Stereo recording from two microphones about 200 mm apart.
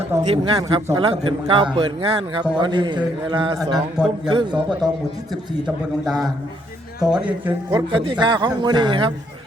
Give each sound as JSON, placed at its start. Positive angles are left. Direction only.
{"t": 0.1, "sound": "a man's voice", "side_deg": -20}
{"t": 3.6, "sound": "a man's voice", "side_deg": 0}
{"t": 4.3, "sound": "a man's voice", "side_deg": -25}
{"t": 4.8, "sound": "a man's voice", "side_deg": 0}
{"t": 7.7, "sound": "a man's voice", "side_deg": -20}